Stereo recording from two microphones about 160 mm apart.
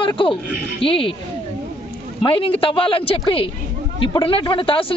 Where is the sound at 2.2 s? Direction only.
35° left (ahead or behind).